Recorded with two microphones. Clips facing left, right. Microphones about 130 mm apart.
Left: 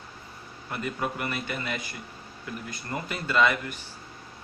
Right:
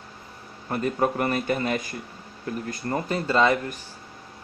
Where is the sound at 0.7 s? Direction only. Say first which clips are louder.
Right 7 dB; 40° right (ahead or behind).